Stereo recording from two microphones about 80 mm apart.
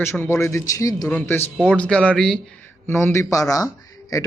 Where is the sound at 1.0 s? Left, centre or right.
Left.